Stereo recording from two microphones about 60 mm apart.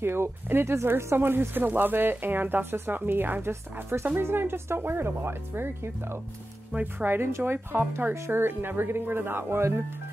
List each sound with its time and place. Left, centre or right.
0.0 s speech: right
6.7 s speech: right
7.1 s speech: right